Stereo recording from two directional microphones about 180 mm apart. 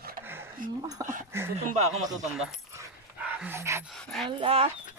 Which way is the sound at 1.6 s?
40° right (ahead or behind).